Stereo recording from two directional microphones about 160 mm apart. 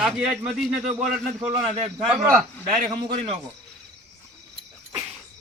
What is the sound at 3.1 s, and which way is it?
Speech, 40° right (ahead or behind).